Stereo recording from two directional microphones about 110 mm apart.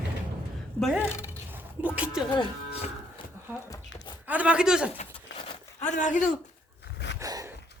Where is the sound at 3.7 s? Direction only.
40° left (ahead or behind).